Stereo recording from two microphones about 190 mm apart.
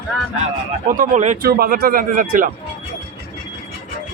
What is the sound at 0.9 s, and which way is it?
Speech, 40° right (ahead or behind).